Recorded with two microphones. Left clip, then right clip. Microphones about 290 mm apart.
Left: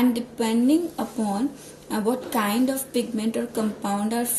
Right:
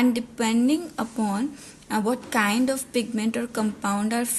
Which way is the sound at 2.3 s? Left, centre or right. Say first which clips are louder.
Right 1 dB; right.